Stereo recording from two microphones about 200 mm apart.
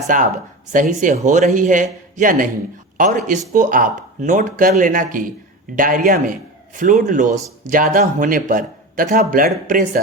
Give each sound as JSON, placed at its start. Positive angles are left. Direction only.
{"t": 0.1, "sound": "a man's voice", "side_deg": -40}